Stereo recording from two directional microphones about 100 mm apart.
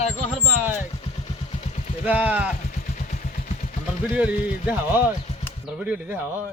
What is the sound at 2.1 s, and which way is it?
Speech, 15° right (ahead or behind).